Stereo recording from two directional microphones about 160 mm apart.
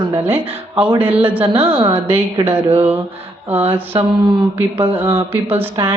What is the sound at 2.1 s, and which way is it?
Speech, 15° right (ahead or behind).